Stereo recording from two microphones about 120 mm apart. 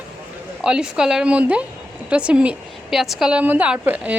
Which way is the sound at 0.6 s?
5° right (ahead or behind).